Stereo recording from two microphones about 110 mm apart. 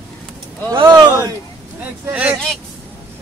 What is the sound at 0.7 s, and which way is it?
Speech, 40° right (ahead or behind).